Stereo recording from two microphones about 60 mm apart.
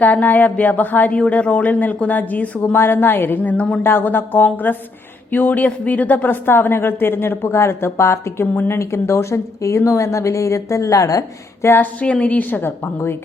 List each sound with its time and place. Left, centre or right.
0.0 s a man's voice: left
2.6 s a woman's voice: left
11.8 s a man's voice: left